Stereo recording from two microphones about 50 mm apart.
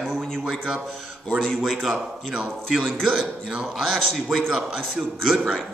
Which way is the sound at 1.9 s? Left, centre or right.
Right.